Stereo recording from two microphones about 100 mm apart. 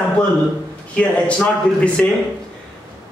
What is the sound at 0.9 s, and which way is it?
A man's voice, 10° left (ahead or behind).